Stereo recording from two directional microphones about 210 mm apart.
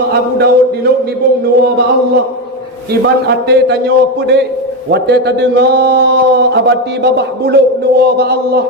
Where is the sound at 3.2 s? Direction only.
50° right (ahead or behind).